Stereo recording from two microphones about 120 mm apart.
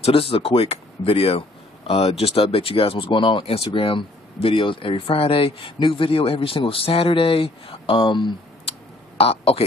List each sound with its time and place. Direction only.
0.0 s speech: 50° left (ahead or behind)
9.2 s speech: 50° left (ahead or behind)